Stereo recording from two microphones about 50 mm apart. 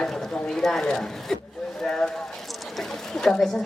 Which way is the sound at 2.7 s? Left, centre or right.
Centre.